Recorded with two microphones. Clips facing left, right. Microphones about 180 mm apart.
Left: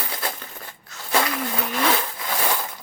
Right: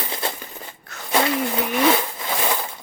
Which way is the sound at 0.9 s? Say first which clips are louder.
Right 4 dB; 60° right (ahead or behind).